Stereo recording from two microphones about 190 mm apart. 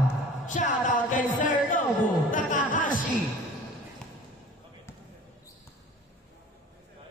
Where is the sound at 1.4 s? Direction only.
45° left (ahead or behind).